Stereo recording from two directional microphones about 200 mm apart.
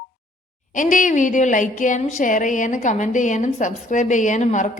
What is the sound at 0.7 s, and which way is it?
A woman's voice, 40° left (ahead or behind).